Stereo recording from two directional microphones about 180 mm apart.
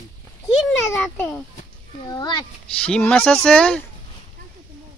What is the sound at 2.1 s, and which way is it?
Speech, 25° left (ahead or behind).